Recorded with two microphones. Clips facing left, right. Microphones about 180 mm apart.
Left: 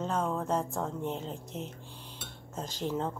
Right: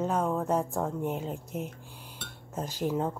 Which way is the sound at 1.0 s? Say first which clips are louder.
Right 3 dB; 10° right (ahead or behind).